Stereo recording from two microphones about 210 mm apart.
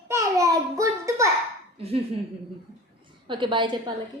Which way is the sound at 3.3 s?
20° right (ahead or behind).